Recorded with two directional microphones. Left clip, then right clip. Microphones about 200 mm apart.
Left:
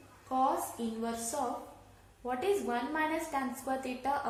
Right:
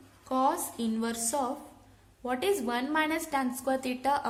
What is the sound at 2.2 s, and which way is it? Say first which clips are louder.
A woman's voice: right 3 dB; 40° right (ahead or behind).